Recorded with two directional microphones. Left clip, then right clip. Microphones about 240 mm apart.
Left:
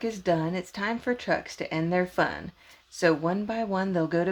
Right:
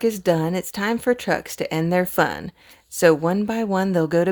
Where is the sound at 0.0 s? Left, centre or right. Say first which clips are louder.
Right 7 dB; right.